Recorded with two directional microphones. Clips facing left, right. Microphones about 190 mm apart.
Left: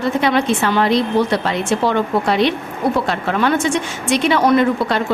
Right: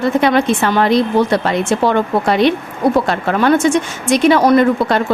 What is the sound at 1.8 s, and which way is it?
A woman's voice, 50° right (ahead or behind).